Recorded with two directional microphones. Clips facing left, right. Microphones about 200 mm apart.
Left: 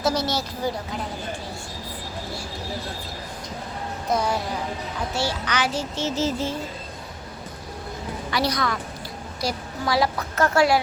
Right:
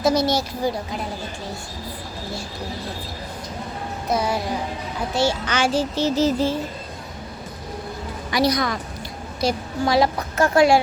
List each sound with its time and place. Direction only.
0.0 s speech: 15° right (ahead or behind)
4.1 s speech: 10° right (ahead or behind)
5.1 s child singing: 25° right (ahead or behind)
8.3 s a woman's voice: 15° right (ahead or behind)